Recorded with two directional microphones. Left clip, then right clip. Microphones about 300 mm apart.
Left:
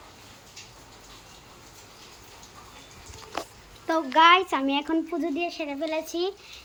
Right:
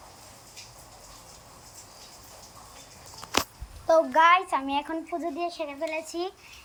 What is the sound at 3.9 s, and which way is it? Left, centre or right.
A child's voice, centre.